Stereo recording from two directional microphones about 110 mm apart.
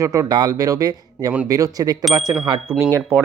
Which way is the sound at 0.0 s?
30° right (ahead or behind).